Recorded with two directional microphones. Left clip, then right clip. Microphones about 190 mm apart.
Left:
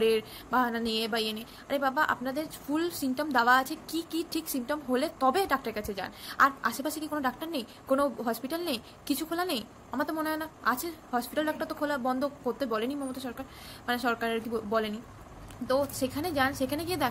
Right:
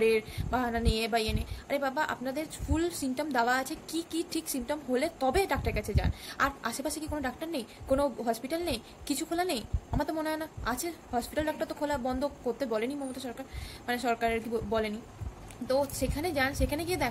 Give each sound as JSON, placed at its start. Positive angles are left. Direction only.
{"t": 0.0, "sound": "a woman's voice", "side_deg": -15}